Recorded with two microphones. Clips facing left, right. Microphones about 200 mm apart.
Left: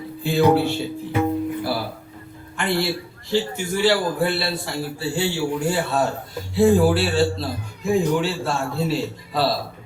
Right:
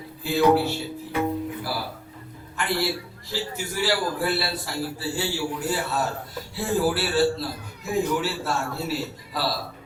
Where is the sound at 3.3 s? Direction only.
25° left (ahead or behind).